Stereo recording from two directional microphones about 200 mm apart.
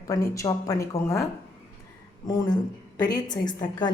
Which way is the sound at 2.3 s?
20° left (ahead or behind).